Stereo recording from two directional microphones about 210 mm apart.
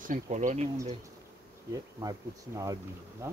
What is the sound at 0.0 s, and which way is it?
Speech, 40° right (ahead or behind).